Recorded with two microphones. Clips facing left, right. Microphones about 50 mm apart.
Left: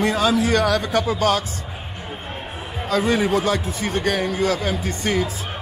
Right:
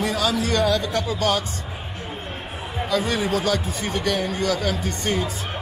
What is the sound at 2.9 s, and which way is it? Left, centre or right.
A man's voice, left.